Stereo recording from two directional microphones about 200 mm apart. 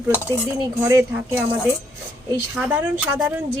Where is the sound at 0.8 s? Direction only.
15° right (ahead or behind).